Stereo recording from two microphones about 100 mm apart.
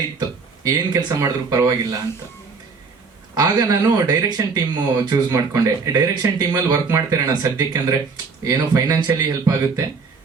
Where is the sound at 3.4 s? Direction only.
40° right (ahead or behind).